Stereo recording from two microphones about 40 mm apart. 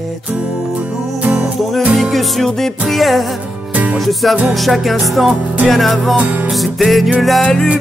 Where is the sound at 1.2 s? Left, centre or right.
Right.